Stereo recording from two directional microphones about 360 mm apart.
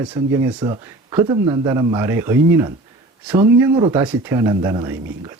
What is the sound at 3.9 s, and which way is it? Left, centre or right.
Speech, centre.